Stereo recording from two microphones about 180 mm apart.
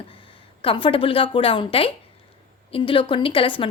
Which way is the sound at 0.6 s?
30° left (ahead or behind).